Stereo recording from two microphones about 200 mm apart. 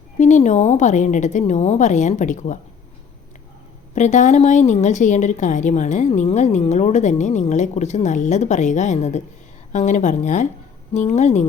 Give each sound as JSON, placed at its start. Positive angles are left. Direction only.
{"t": 0.2, "sound": "a woman's voice", "side_deg": 35}
{"t": 3.9, "sound": "a woman's voice", "side_deg": 35}